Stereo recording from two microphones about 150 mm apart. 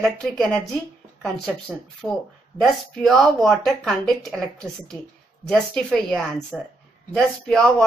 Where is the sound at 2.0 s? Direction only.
5° left (ahead or behind).